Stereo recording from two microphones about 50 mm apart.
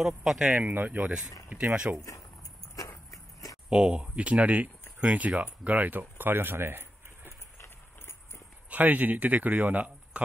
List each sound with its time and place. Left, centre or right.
0.0 s speech: centre
0.7 s speech: right
3.7 s speech: centre; by 7.3 s right
8.6 s speech: right